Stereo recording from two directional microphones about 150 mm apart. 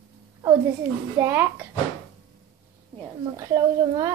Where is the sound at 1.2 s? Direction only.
15° right (ahead or behind).